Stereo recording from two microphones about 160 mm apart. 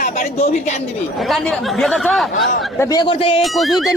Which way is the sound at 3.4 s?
Centre (ahead or behind).